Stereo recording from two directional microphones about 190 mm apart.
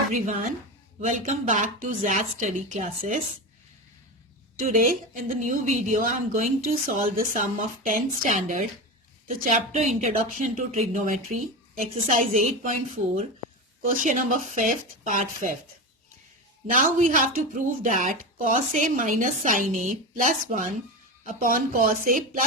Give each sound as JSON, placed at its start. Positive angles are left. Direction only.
{"t": 0.9, "sound": "a woman's voice", "side_deg": -40}
{"t": 4.6, "sound": "a woman's voice", "side_deg": -45}
{"t": 16.6, "sound": "speech", "side_deg": -45}